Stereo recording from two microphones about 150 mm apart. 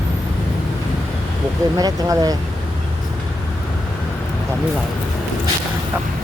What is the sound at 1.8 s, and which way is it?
Speech, 25° right (ahead or behind).